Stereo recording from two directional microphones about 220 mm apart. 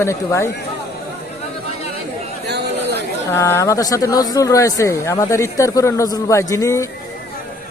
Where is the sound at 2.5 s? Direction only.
50° right (ahead or behind).